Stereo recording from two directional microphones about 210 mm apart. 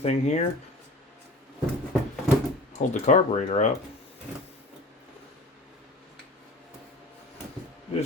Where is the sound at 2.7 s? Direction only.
35° left (ahead or behind).